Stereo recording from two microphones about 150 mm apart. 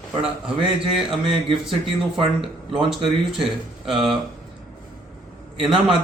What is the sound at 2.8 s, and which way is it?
Speech, centre (ahead or behind).